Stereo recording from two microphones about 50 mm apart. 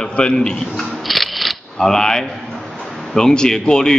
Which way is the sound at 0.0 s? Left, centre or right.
Left.